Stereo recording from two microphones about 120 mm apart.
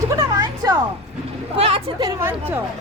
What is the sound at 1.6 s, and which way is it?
Speech, 55° right (ahead or behind).